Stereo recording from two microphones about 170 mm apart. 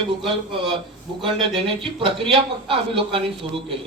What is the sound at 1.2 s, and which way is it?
A man's voice, 30° right (ahead or behind).